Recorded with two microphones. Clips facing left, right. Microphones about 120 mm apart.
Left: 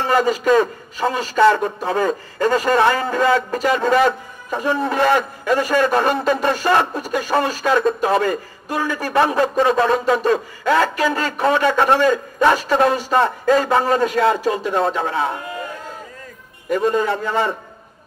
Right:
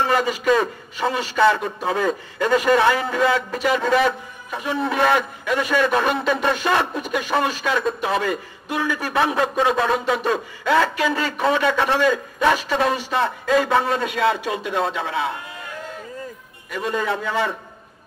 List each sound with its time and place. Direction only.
0.0 s a man's voice: 40° left (ahead or behind)
16.7 s a man's voice: 40° left (ahead or behind)